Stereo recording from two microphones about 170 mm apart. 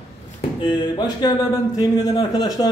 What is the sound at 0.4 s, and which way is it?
A man's voice, 30° left (ahead or behind).